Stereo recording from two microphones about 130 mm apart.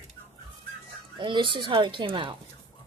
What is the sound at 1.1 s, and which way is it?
Speech, 35° right (ahead or behind).